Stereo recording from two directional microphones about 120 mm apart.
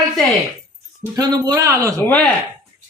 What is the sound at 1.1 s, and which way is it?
Speech, 35° right (ahead or behind).